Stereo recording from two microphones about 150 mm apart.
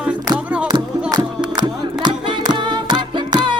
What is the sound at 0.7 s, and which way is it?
Music, 30° right (ahead or behind).